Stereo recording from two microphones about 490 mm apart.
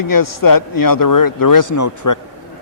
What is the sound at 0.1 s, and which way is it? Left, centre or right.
A man's voice, left.